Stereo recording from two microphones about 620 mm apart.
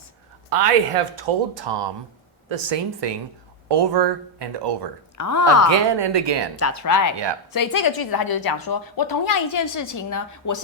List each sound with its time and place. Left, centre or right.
0.5 s speech: right
5.1 s a woman's voice: left
5.9 s speech: right
6.6 s a woman's voice: left